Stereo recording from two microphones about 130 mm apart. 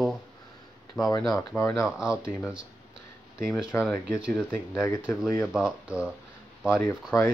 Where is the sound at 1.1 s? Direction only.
30° left (ahead or behind).